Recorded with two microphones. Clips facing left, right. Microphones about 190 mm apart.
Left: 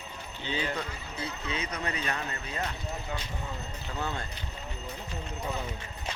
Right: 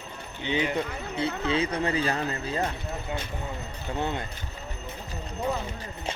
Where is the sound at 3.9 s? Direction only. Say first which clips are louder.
Right 5 dB; 25° right (ahead or behind).